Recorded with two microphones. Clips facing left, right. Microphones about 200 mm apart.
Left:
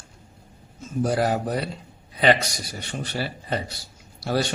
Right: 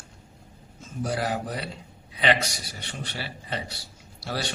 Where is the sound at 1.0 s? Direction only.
45° left (ahead or behind).